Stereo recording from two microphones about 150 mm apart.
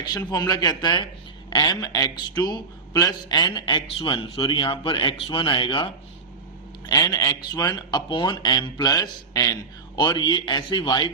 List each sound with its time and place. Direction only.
0.1 s a man's voice: 25° left (ahead or behind)